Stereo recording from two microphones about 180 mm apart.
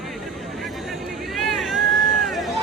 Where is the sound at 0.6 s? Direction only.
Centre (ahead or behind).